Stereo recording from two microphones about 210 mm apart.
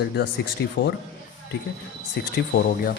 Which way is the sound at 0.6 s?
55° left (ahead or behind).